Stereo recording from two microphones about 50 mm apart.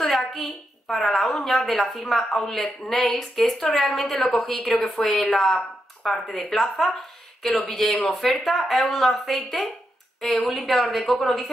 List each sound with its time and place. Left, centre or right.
0.0 s a woman's voice: centre